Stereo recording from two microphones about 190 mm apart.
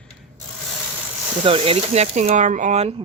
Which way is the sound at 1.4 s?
30° right (ahead or behind).